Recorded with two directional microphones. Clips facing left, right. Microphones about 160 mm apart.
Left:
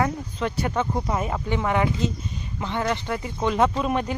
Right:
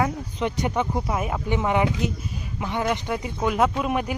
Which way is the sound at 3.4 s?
5° right (ahead or behind).